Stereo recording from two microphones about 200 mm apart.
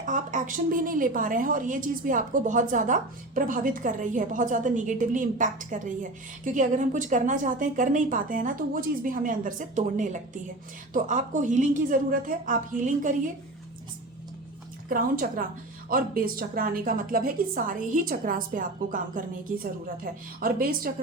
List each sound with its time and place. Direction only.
0.0 s a woman's voice: 40° right (ahead or behind)
14.8 s a woman's voice: 45° right (ahead or behind)